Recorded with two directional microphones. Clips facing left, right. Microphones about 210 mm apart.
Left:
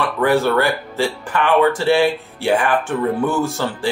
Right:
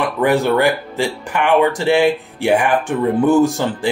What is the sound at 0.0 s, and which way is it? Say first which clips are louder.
Speech: right 1 dB; 15° right (ahead or behind).